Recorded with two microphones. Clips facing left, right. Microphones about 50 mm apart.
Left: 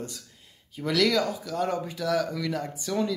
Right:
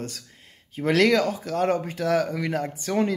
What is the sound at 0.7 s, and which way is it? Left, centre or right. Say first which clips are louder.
Speech: right 4 dB; right.